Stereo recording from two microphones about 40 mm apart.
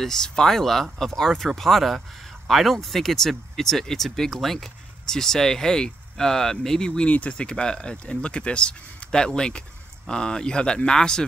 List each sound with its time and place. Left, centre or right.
0.0 s speech: centre
7.1 s speech: left
7.3 s speech: left